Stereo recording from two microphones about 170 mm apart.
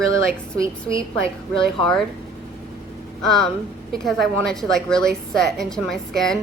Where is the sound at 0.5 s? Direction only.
20° right (ahead or behind).